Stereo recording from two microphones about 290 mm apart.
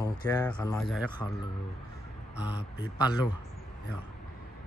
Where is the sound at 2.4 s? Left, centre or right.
Centre.